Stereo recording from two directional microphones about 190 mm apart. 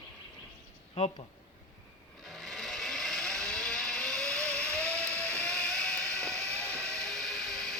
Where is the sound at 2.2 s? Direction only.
Centre (ahead or behind).